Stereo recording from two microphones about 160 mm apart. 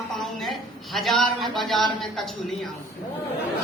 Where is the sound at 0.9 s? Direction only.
Centre (ahead or behind).